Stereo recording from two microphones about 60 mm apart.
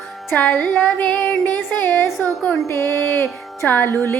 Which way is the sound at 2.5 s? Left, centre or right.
Left.